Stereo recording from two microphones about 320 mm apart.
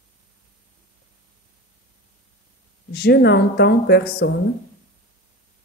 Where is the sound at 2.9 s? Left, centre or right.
Left.